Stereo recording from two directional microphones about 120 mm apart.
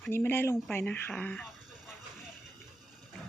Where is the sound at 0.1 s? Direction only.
20° left (ahead or behind).